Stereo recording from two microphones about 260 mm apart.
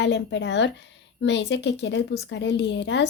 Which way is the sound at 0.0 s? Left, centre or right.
Left.